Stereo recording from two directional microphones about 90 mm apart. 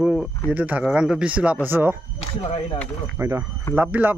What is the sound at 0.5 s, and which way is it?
Speech, 15° right (ahead or behind).